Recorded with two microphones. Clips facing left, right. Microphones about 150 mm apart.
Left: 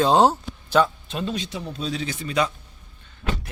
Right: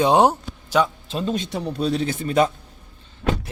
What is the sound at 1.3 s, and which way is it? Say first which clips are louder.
Speech: right 5 dB; 60° right (ahead or behind).